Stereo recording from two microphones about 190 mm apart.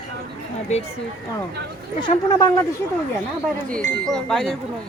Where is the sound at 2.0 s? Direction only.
20° left (ahead or behind).